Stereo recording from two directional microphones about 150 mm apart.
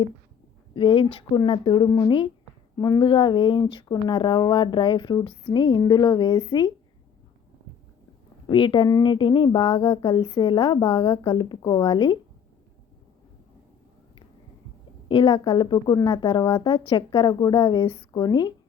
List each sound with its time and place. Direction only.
0.7 s speech: 35° left (ahead or behind)
8.4 s speech: 35° left (ahead or behind)
15.1 s a woman's voice: 30° left (ahead or behind)